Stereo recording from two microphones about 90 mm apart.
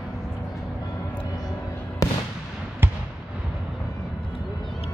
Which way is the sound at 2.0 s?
40° left (ahead or behind).